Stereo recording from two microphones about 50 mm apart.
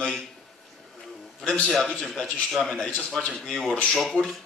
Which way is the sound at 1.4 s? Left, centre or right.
Centre.